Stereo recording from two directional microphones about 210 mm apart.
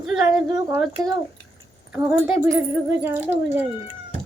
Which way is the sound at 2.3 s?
10° right (ahead or behind).